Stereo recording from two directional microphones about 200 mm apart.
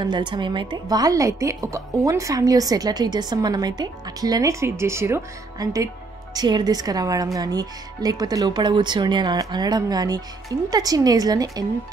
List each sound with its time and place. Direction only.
0.0 s a woman's voice: 25° right (ahead or behind)